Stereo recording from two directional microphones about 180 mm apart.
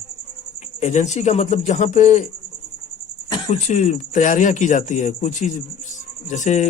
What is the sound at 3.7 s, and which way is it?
A man's voice, 40° left (ahead or behind).